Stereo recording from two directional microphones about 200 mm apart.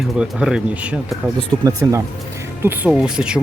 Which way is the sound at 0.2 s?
5° right (ahead or behind).